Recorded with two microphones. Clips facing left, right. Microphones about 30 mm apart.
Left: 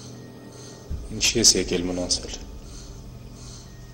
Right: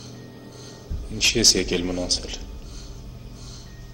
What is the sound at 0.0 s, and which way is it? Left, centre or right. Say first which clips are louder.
Music: even; centre.